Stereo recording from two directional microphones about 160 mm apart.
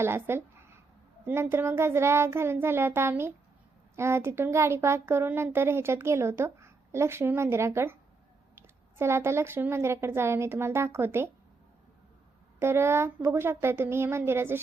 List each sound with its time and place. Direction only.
0.0 s a child's voice: 15° right (ahead or behind)
12.5 s a child's voice: 15° right (ahead or behind)